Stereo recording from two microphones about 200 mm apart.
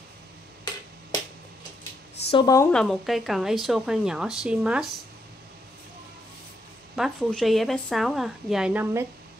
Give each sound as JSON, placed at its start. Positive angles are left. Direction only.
{"t": 2.3, "sound": "speech", "side_deg": 15}
{"t": 2.7, "sound": "a woman's voice", "side_deg": 5}
{"t": 7.0, "sound": "a woman's voice", "side_deg": 0}